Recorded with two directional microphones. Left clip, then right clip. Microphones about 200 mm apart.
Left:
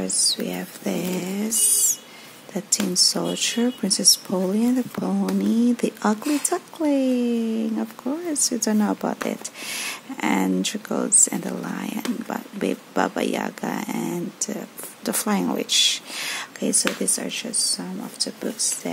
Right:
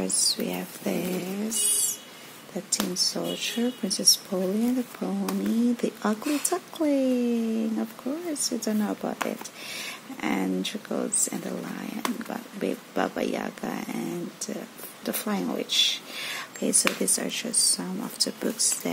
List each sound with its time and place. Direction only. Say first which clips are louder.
0.0 s speech: left 3 dB; centre (ahead or behind)
2.9 s a woman's voice: left 9 dB; 20° left (ahead or behind); by 18.7 s 5° right (ahead or behind)